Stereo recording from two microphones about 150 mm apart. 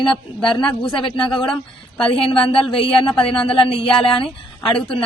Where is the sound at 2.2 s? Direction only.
35° left (ahead or behind).